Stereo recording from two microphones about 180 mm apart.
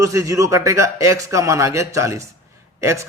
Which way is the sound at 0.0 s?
15° right (ahead or behind).